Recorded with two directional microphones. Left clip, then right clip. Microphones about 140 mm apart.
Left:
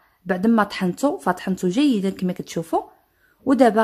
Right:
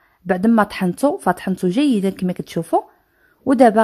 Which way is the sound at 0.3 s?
40° right (ahead or behind).